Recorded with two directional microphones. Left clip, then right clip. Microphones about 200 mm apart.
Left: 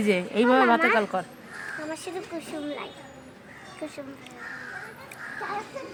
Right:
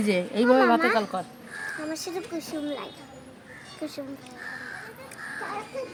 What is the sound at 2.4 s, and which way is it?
Speech, 45° right (ahead or behind).